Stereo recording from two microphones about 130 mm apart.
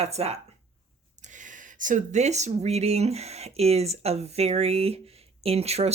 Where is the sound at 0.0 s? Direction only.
50° right (ahead or behind).